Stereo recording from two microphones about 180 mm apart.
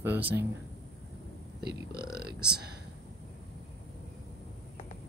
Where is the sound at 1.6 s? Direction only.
60° right (ahead or behind).